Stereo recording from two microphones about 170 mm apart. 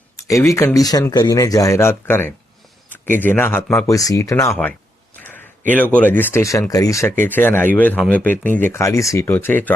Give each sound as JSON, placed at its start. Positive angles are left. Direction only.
{"t": 0.2, "sound": "speech", "side_deg": 20}
{"t": 5.2, "sound": "a sound", "side_deg": 10}
{"t": 5.7, "sound": "speech", "side_deg": 10}